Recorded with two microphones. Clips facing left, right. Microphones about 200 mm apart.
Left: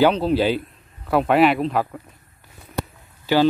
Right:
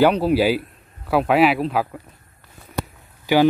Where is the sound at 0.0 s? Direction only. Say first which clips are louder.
Right 1 dB; 10° right (ahead or behind).